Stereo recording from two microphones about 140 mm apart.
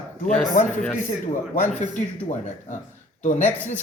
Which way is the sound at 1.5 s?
65° left (ahead or behind).